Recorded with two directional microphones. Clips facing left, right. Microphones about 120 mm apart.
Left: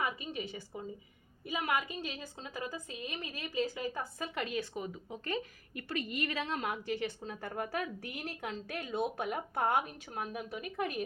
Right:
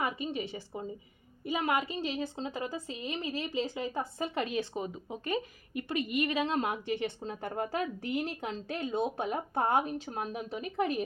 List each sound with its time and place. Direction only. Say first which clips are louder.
0.0 s a woman's voice: right 3 dB; 30° right (ahead or behind)